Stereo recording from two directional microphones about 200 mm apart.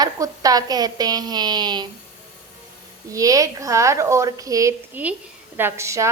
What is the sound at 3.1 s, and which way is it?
A woman's voice, 15° right (ahead or behind).